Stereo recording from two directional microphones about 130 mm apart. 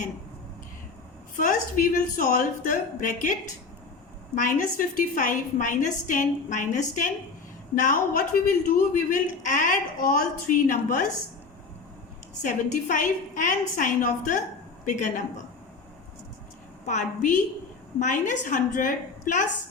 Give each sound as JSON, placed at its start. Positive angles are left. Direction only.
{"t": 1.4, "sound": "a man's voice", "side_deg": 90}
{"t": 4.4, "sound": "a woman's voice", "side_deg": 90}
{"t": 12.4, "sound": "a woman's voice", "side_deg": 75}
{"t": 14.8, "sound": "a woman's voice", "side_deg": 70}
{"t": 16.8, "sound": "a woman's voice", "side_deg": 70}